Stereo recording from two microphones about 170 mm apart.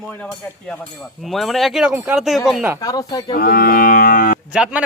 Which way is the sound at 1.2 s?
Centre (ahead or behind).